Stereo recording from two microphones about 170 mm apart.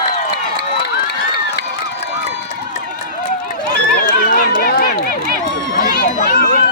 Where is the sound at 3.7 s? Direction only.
55° left (ahead or behind).